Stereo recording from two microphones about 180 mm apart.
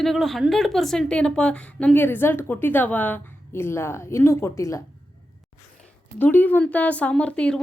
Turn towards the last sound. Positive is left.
turn(degrees=5)  # may be behind; listen again after turning